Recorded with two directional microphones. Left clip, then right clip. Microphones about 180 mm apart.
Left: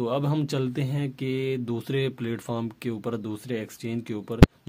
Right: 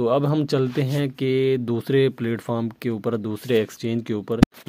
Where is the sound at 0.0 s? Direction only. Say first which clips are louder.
Right 7 dB; 40° right (ahead or behind).